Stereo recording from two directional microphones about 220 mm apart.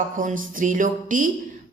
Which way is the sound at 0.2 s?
35° right (ahead or behind).